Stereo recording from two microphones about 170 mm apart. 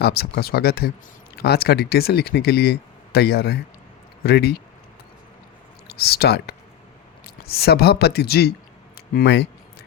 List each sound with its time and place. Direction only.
0.0 s speech: 65° left (ahead or behind)
5.9 s speech: 65° left (ahead or behind)
9.1 s speech: 85° left